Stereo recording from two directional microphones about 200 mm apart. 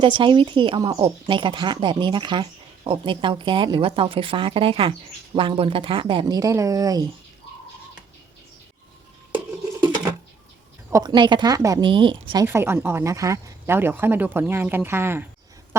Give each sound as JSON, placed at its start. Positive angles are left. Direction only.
{"t": 0.0, "sound": "speech", "side_deg": -25}
{"t": 10.9, "sound": "speech", "side_deg": -20}
{"t": 12.5, "sound": "speech", "side_deg": -10}